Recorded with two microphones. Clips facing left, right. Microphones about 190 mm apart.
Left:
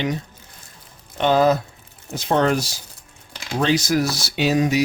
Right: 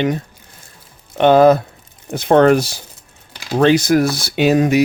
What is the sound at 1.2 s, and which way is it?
Speech, 60° right (ahead or behind).